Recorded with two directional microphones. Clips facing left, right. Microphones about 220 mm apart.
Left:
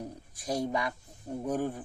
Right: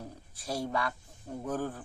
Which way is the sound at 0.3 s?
15° left (ahead or behind).